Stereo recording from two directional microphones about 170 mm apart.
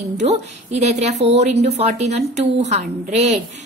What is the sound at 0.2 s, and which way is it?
A woman's voice, 40° right (ahead or behind).